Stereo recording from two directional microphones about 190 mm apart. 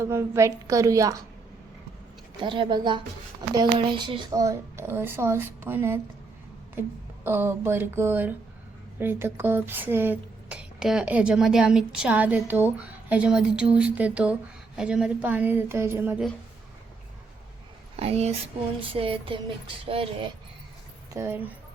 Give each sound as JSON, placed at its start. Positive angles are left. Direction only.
{"t": 0.0, "sound": "speech", "side_deg": -15}
{"t": 2.4, "sound": "music", "side_deg": -25}
{"t": 3.5, "sound": "speech", "side_deg": -25}
{"t": 7.3, "sound": "speech", "side_deg": -10}
{"t": 17.9, "sound": "speech", "side_deg": -30}
{"t": 18.8, "sound": "music", "side_deg": -30}
{"t": 21.1, "sound": "speech", "side_deg": -15}